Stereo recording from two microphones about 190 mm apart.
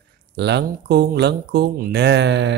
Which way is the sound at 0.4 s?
60° right (ahead or behind).